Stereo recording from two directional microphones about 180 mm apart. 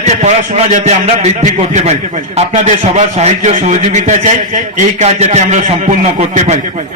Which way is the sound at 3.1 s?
40° right (ahead or behind).